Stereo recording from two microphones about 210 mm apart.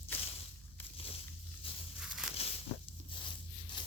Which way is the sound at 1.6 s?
25° left (ahead or behind).